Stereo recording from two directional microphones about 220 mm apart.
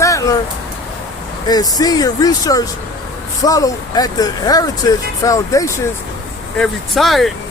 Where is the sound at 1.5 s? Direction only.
20° left (ahead or behind).